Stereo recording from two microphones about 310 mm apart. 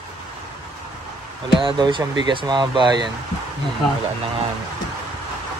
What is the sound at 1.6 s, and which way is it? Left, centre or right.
Speech, centre.